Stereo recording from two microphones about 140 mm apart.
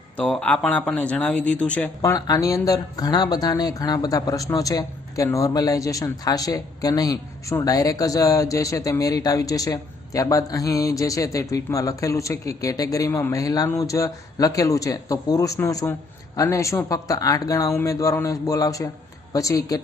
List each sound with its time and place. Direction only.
0.2 s speech: 5° left (ahead or behind)
2.0 s speech: 25° left (ahead or behind)